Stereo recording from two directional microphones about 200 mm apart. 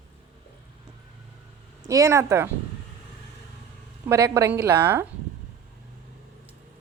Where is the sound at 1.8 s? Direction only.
15° right (ahead or behind).